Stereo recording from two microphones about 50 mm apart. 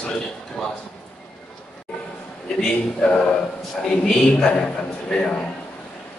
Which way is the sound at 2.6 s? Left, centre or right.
Centre.